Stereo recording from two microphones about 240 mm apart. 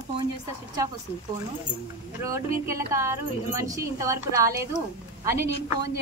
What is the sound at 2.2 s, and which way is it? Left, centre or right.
A woman's voice, centre.